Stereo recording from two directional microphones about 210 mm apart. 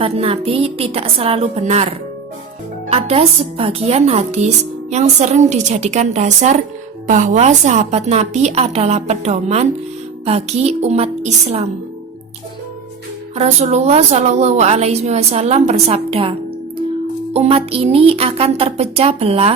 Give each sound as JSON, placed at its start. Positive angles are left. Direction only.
{"t": 0.0, "sound": "a woman's voice", "side_deg": -30}
{"t": 13.3, "sound": "a woman's voice", "side_deg": -30}
{"t": 17.3, "sound": "speech", "side_deg": -30}